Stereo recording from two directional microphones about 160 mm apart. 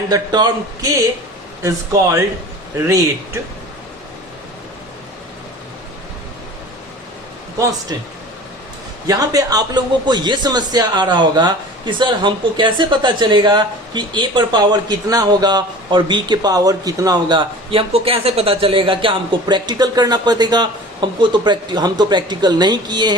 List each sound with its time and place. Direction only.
0.1 s a man's voice: 25° right (ahead or behind)
9.0 s a man's voice: 20° right (ahead or behind)